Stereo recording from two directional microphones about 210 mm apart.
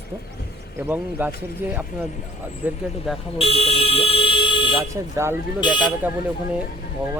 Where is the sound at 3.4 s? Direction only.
25° left (ahead or behind).